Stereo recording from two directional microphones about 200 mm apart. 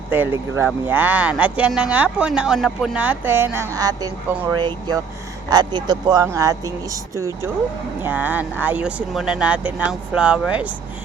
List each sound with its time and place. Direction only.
0.1 s speech: 10° right (ahead or behind)